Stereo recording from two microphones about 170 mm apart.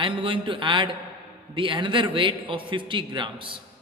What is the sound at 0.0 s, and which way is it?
A man's voice, 30° right (ahead or behind).